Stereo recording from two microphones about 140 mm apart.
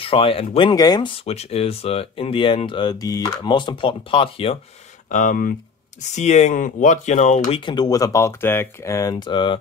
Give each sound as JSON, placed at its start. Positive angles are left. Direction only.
{"t": 0.0, "sound": "speech", "side_deg": 40}
{"t": 0.7, "sound": "speech", "side_deg": 30}
{"t": 5.1, "sound": "speech", "side_deg": 70}
{"t": 6.1, "sound": "speech", "side_deg": 55}
{"t": 7.6, "sound": "speech", "side_deg": 30}
{"t": 9.1, "sound": "speech", "side_deg": 35}